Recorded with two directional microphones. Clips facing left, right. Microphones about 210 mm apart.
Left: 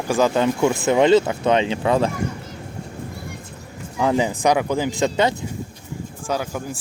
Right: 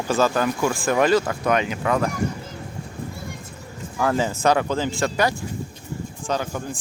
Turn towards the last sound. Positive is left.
turn(degrees=10)  # may be behind; listen again after turning